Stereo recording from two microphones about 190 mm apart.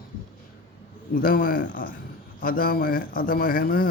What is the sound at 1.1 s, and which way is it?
Speech, 45° left (ahead or behind).